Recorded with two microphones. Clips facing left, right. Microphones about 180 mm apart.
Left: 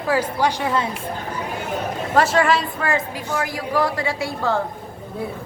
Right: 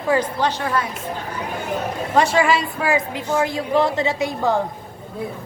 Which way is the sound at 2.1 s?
Centre (ahead or behind).